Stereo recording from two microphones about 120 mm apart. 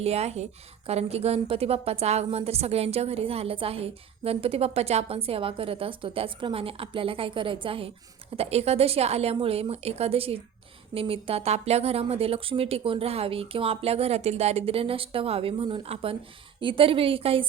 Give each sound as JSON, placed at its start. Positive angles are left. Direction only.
{"t": 0.0, "sound": "a woman's voice", "side_deg": -60}
{"t": 8.4, "sound": "a woman's voice", "side_deg": -60}